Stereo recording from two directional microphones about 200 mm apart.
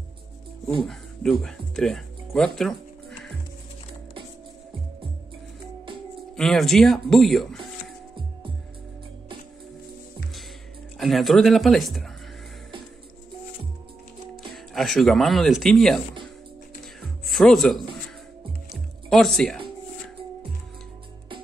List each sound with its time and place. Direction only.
1.4 s music: centre (ahead or behind)
6.3 s speech: centre (ahead or behind)
11.0 s speech: centre (ahead or behind)
14.5 s speech: centre (ahead or behind)
17.0 s music: centre (ahead or behind)
19.0 s speech: centre (ahead or behind)